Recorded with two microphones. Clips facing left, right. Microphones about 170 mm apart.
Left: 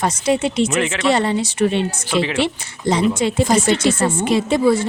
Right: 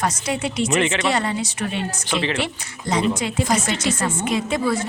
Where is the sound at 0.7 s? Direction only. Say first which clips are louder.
Even; 5° left (ahead or behind).